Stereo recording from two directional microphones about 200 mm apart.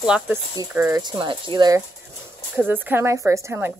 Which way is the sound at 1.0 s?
20° right (ahead or behind).